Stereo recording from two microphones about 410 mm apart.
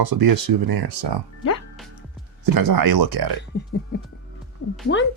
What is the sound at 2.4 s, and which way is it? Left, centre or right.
Speech, right.